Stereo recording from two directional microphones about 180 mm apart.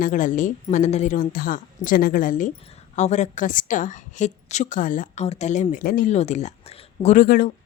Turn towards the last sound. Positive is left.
turn(degrees=55)  # may be behind; listen again after turning